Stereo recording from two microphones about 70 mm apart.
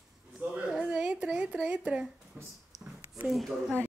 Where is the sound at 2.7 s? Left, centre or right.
Centre.